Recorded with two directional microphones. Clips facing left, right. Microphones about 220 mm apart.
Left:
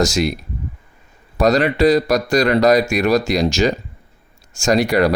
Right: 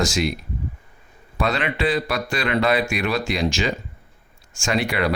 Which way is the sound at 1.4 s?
40° left (ahead or behind).